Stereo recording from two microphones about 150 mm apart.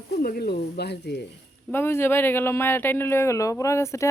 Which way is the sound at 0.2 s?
85° left.